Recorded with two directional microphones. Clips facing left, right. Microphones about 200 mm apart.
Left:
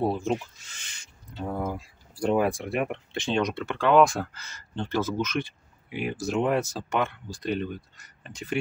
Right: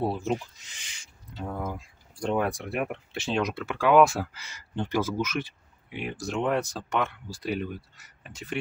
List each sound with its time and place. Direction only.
0.0 s speech: 5° right (ahead or behind)
0.6 s owl: 15° right (ahead or behind)
1.4 s speech: 5° left (ahead or behind)